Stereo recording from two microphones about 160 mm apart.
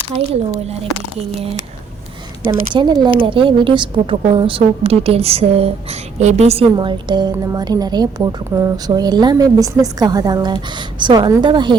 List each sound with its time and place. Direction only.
2.7 s a woman's voice: 25° right (ahead or behind)
6.7 s a woman's voice: 30° right (ahead or behind)